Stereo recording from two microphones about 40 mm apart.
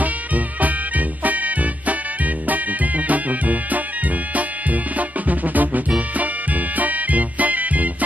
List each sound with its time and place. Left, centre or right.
0.0 s music: right